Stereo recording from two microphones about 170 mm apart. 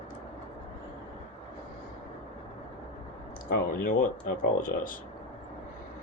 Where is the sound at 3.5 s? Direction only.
55° left (ahead or behind).